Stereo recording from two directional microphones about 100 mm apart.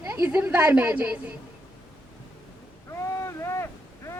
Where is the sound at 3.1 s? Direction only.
30° left (ahead or behind).